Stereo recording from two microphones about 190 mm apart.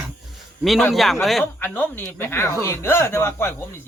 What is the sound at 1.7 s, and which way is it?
Speech, 10° left (ahead or behind).